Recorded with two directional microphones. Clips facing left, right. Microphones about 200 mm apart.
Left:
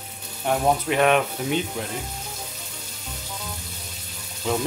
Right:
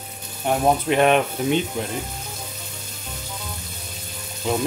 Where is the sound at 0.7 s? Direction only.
25° right (ahead or behind).